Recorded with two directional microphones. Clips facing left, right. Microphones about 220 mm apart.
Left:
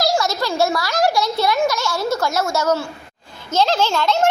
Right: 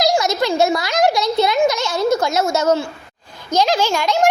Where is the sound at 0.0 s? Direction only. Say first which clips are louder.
Right 3 dB; 20° right (ahead or behind).